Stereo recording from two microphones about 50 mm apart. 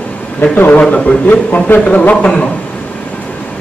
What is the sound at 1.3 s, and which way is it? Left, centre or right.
Speech, left.